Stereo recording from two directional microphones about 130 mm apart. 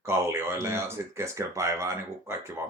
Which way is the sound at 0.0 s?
20° right (ahead or behind).